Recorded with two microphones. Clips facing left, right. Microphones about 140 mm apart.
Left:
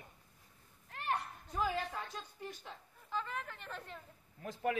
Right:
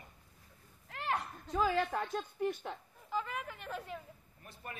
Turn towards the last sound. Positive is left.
turn(degrees=90)